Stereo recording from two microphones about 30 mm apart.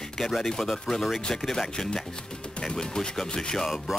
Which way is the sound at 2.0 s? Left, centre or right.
Left.